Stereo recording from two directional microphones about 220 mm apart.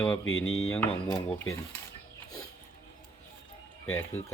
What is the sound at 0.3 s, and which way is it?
Mantra, 65° left (ahead or behind).